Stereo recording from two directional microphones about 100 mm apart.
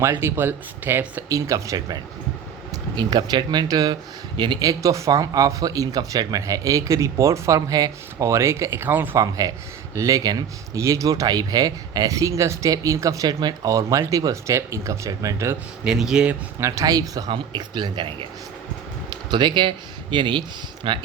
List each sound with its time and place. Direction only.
0.2 s speech: 25° right (ahead or behind)
1.3 s speech: 35° right (ahead or behind)
2.9 s speech: 45° right (ahead or behind)
4.7 s speech: 35° right (ahead or behind)
9.1 s speech: 35° right (ahead or behind)
13.2 s speech: 45° right (ahead or behind)
15.8 s speech: 5° right (ahead or behind)
16.6 s speech: 30° right (ahead or behind)
17.3 s speech: 50° right (ahead or behind)
19.3 s speech: 50° right (ahead or behind)